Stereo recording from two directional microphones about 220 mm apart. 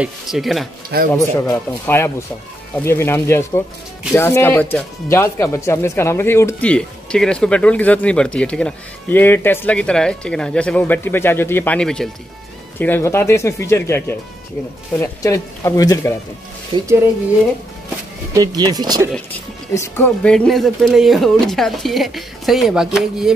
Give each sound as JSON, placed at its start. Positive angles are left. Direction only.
{"t": 0.0, "sound": "speech", "side_deg": 0}
{"t": 0.9, "sound": "speech", "side_deg": -45}
{"t": 1.5, "sound": "speech", "side_deg": 10}
{"t": 16.7, "sound": "speech", "side_deg": -15}
{"t": 18.3, "sound": "speech", "side_deg": -15}
{"t": 19.7, "sound": "speech", "side_deg": 10}